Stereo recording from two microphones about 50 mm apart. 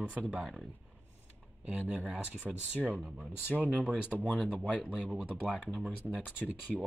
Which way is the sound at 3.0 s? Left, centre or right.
Centre.